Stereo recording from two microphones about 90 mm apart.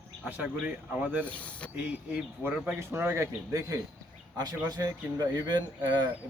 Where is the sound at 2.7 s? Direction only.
25° right (ahead or behind).